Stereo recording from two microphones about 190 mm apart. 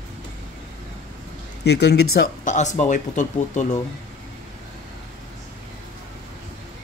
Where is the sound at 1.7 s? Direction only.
60° left (ahead or behind); by 3.8 s 40° left (ahead or behind).